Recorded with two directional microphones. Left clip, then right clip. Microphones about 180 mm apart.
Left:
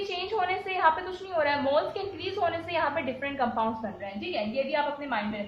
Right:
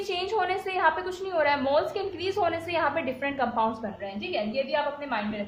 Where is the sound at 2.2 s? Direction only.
40° right (ahead or behind).